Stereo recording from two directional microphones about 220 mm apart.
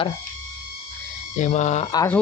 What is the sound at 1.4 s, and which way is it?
Speech, 30° left (ahead or behind).